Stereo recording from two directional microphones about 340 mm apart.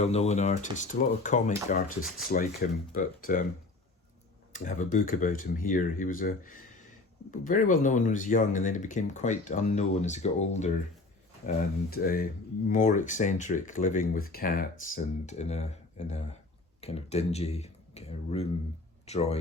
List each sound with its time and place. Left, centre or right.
0.0 s speech: centre
4.5 s speech: left